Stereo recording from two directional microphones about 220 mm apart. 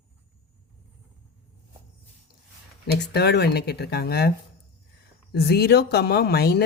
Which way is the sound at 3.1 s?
50° left (ahead or behind).